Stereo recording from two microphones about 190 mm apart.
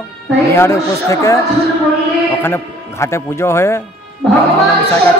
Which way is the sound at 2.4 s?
15° left (ahead or behind).